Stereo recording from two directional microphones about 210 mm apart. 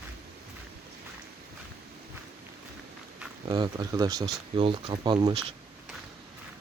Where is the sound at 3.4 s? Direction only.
20° right (ahead or behind).